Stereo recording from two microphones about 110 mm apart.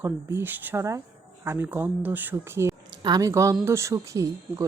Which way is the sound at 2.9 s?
40° right (ahead or behind).